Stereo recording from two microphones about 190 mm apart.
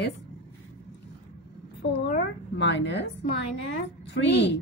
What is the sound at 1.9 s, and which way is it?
A woman's voice, 65° left (ahead or behind).